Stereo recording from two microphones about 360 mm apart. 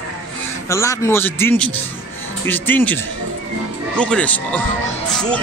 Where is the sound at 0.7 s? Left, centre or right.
Centre.